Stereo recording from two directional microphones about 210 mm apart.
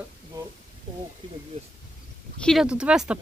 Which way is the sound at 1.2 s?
25° right (ahead or behind).